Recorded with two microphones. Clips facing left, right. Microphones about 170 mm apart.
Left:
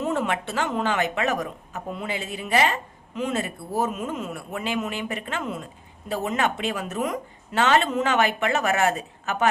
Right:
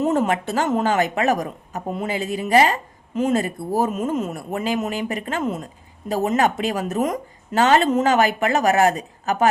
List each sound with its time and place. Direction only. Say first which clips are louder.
0.0 s speech: right 6 dB; 40° right (ahead or behind)